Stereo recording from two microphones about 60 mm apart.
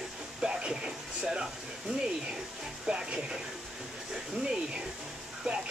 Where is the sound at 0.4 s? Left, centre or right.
Centre.